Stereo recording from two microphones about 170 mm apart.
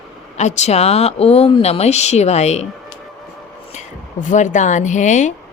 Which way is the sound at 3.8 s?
45° left (ahead or behind).